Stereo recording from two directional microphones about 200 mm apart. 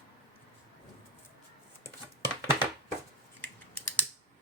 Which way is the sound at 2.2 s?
10° right (ahead or behind).